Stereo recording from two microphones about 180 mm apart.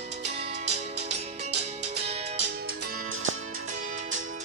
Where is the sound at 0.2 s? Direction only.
40° right (ahead or behind).